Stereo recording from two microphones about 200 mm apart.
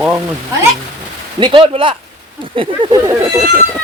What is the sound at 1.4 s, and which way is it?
Speech, 25° right (ahead or behind).